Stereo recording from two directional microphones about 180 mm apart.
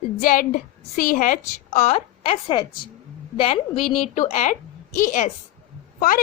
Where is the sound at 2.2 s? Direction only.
30° left (ahead or behind).